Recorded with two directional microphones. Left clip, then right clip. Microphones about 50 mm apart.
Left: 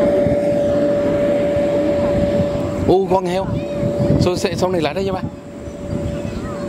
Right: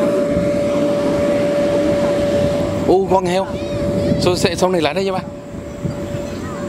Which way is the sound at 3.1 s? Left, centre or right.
Centre.